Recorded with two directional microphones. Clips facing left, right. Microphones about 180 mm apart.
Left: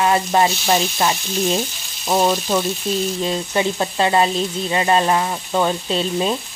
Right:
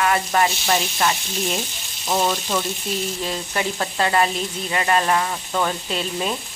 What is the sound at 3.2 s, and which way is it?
Sizzle, 25° left (ahead or behind).